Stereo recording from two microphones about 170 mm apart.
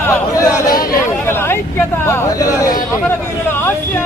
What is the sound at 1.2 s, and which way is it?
Hubbub, 15° left (ahead or behind).